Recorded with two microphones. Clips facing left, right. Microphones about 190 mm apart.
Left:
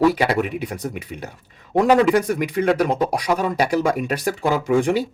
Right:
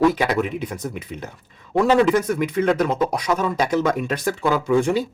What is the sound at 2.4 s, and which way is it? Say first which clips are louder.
Speech: even; 10° left (ahead or behind).